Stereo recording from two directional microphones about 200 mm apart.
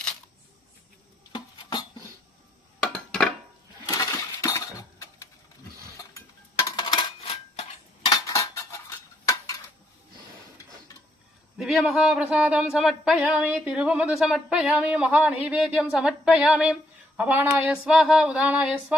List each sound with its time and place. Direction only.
1.3 s music: 20° left (ahead or behind)
2.9 s a sound: centre (ahead or behind)
3.8 s a sound: 20° left (ahead or behind)
6.7 s coin: 20° left (ahead or behind)
9.2 s dishes: 15° left (ahead or behind)
11.5 s speech: centre (ahead or behind)